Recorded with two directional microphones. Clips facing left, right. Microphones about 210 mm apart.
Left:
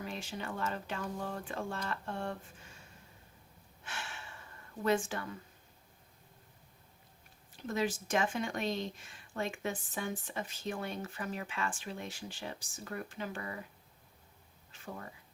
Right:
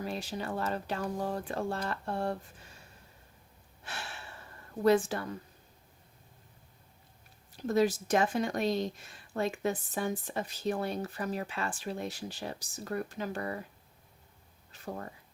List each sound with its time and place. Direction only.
0.0 s speech: 35° right (ahead or behind)
3.8 s gasp: 35° right (ahead or behind)
4.8 s speech: 35° right (ahead or behind)
7.7 s speech: 40° right (ahead or behind)
14.7 s a sound: 40° right (ahead or behind)